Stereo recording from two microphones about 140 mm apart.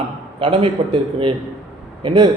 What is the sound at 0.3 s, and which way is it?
A man's voice, 40° right (ahead or behind).